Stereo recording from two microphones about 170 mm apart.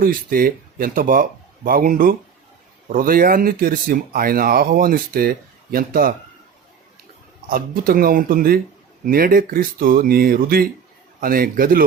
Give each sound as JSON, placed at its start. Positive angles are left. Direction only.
{"t": 0.0, "sound": "speech", "side_deg": -55}
{"t": 7.5, "sound": "speech", "side_deg": -60}